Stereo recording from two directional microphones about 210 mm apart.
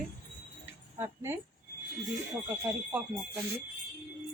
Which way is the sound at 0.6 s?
10° right (ahead or behind).